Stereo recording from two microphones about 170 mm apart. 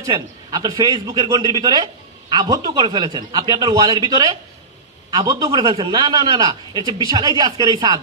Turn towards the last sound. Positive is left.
turn(degrees=-25)  # may be behind; listen again after turning